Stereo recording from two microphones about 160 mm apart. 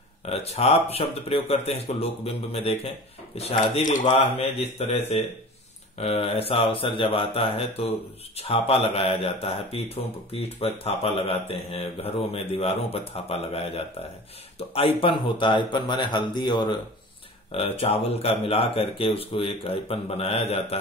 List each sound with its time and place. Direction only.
0.3 s a man's voice: 40° left (ahead or behind)